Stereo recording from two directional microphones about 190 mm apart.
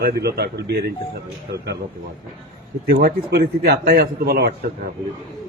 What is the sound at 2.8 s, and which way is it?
A man's voice, 55° right (ahead or behind).